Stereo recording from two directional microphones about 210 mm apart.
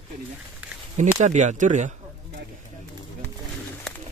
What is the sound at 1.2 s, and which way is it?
Speech, 35° right (ahead or behind).